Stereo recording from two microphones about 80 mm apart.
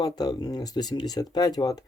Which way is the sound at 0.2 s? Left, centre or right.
Left.